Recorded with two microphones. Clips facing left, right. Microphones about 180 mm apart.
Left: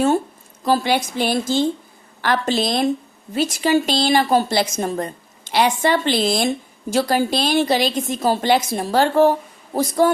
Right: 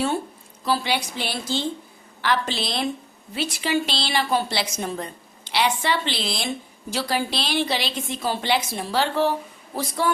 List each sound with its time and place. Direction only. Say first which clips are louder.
0.6 s a woman's voice: left 6 dB; 45° left (ahead or behind)